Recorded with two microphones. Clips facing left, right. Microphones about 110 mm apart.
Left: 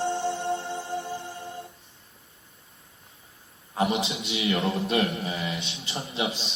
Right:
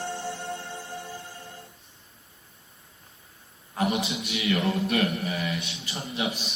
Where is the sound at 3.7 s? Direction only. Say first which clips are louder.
Left 1 dB; 25° left (ahead or behind).